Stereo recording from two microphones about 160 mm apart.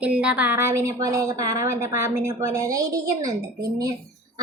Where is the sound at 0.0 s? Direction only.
5° right (ahead or behind).